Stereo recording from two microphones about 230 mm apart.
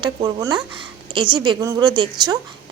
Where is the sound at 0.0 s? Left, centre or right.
Centre.